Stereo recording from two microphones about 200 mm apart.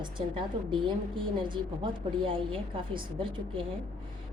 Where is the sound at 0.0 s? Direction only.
25° right (ahead or behind).